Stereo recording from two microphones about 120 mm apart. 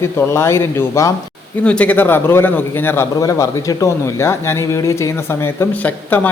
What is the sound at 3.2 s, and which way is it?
A man's voice, 30° left (ahead or behind).